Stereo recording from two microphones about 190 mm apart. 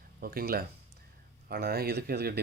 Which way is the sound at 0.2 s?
50° right (ahead or behind).